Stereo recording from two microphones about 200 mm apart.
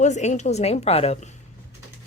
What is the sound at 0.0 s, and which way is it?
A woman's voice, 35° left (ahead or behind).